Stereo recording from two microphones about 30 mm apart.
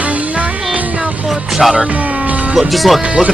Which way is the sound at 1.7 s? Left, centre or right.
Right.